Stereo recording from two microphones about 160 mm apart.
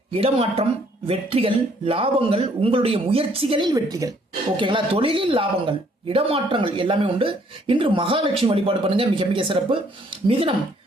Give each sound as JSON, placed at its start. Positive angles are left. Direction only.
{"t": 0.1, "sound": "speech", "side_deg": -35}